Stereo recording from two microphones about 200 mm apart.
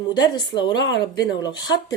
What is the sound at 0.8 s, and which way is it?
Speech, 60° left (ahead or behind).